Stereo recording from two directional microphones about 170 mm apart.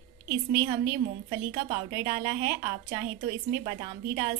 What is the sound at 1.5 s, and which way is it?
Speech, 35° right (ahead or behind).